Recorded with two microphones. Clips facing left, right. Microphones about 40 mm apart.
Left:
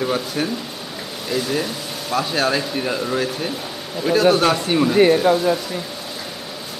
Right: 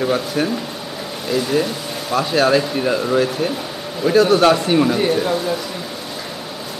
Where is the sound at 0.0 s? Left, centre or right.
Centre.